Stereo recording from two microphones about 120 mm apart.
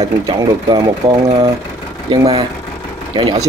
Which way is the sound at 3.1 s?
40° right (ahead or behind).